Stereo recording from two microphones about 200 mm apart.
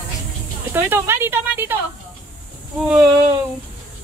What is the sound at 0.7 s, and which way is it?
Speech, 10° right (ahead or behind).